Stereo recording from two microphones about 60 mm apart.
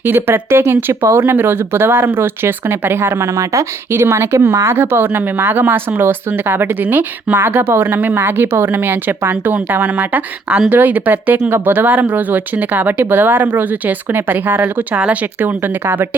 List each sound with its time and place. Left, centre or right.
0.0 s speech: right
3.3 s speech: right